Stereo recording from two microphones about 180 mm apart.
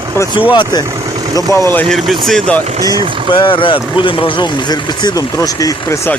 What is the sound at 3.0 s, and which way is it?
Speech, 25° left (ahead or behind).